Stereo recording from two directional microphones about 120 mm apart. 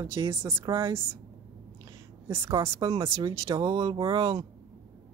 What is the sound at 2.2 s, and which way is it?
A woman's voice, 20° right (ahead or behind).